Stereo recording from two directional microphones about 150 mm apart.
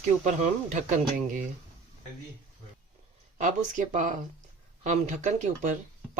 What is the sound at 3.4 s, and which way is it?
Speech, 60° right (ahead or behind).